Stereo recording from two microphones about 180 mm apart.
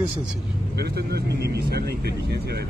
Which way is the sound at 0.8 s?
65° right (ahead or behind).